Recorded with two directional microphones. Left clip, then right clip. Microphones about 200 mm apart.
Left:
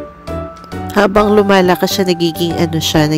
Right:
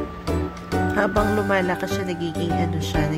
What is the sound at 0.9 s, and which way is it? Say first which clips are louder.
Speech: left 13 dB; 50° left (ahead or behind).